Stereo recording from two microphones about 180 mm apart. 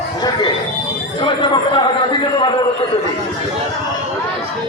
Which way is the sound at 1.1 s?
30° left (ahead or behind).